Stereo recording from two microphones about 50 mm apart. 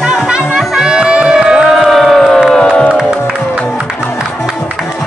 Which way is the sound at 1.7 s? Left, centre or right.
Centre.